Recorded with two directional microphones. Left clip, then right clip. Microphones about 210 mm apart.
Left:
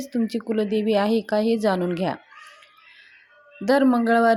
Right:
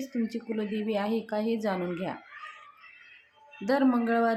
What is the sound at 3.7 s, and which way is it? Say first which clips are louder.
Speech: left 7 dB; 35° left (ahead or behind).